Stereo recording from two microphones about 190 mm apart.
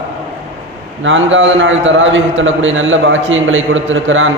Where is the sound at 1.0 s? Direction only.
85° right.